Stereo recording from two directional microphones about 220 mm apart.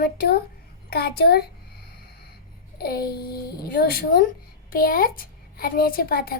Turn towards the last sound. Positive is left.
turn(degrees=45)  # may be behind; listen again after turning